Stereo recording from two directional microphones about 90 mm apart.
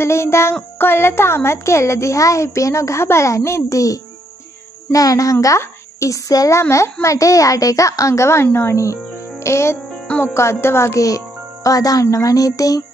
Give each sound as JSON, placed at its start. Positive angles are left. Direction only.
{"t": 0.0, "sound": "child singing", "side_deg": 30}
{"t": 0.7, "sound": "speech", "side_deg": 25}